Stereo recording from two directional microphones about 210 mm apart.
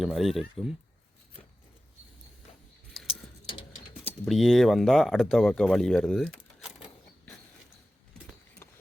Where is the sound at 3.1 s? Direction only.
25° left (ahead or behind).